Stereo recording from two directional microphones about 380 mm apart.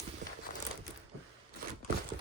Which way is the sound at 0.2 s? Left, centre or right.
Centre.